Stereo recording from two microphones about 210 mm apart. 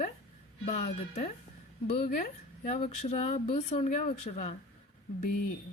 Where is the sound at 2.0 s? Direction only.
40° left (ahead or behind).